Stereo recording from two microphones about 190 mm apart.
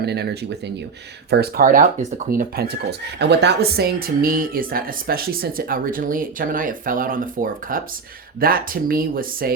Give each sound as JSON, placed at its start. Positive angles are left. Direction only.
{"t": 0.0, "sound": "speech", "side_deg": -60}
{"t": 1.3, "sound": "speech", "side_deg": -55}